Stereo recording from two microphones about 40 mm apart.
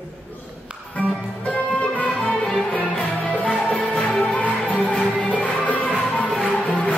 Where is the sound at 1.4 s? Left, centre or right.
Left.